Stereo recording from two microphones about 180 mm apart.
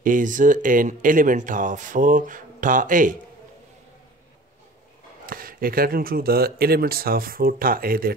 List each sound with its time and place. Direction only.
0.0 s speech: 45° right (ahead or behind)
5.2 s speech: 50° right (ahead or behind)